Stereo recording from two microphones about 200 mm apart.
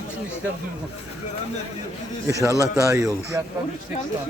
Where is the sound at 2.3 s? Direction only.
15° right (ahead or behind).